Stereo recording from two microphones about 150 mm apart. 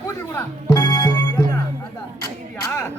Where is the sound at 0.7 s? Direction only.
30° left (ahead or behind).